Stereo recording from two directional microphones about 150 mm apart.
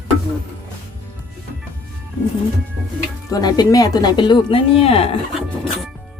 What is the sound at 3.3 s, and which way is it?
A woman's voice, 25° left (ahead or behind).